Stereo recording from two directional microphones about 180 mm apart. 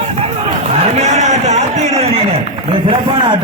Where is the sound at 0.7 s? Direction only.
40° right (ahead or behind).